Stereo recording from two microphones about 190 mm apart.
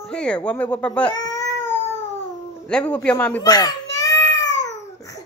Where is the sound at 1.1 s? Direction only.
20° left (ahead or behind).